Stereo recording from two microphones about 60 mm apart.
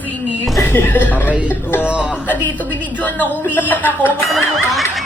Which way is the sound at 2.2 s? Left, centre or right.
Left.